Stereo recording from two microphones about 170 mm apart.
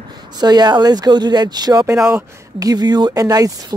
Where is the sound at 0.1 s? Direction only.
25° right (ahead or behind).